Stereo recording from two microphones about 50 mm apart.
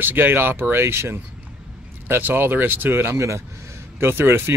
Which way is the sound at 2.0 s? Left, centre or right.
Right.